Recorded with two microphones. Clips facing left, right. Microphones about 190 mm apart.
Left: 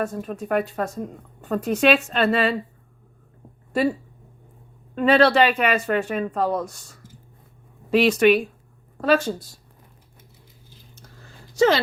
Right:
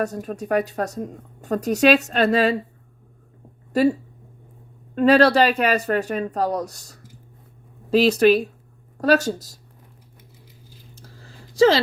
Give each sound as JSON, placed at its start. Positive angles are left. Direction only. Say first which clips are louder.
{"t": 0.0, "sound": "a woman's voice", "louder": "right 1 dB", "side_deg": -40}
{"t": 4.9, "sound": "a woman's voice", "louder": "right 2 dB", "side_deg": -40}
{"t": 11.0, "sound": "a sound", "louder": "right 1 dB", "side_deg": -30}